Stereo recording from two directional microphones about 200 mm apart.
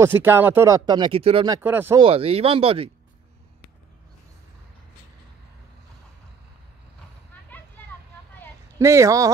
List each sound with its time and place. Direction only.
0.0 s speech: 10° right (ahead or behind)
1.6 s speech: 10° right (ahead or behind)
2.0 s speech: 25° right (ahead or behind)
7.4 s a sound: 10° left (ahead or behind)
8.7 s speech: 15° right (ahead or behind)